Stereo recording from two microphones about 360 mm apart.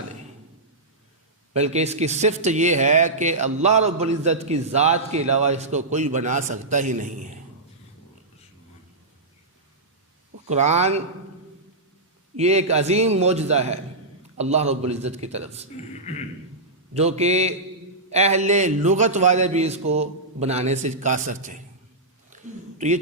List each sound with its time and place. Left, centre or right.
1.5 s speech: centre
10.5 s speech: centre
12.4 s a man's voice: centre
16.9 s a man's voice: centre